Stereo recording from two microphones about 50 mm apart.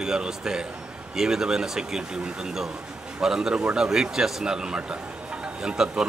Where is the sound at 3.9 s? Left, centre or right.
Centre.